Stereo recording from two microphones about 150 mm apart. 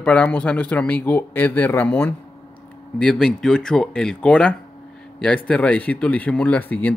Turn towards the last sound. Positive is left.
turn(degrees=10)  # may be behind; listen again after turning